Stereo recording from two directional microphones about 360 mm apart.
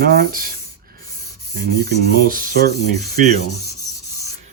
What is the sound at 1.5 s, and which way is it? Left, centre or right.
Speech, right.